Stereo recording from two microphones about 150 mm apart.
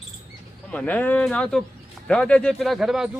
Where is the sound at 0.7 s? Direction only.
10° left (ahead or behind).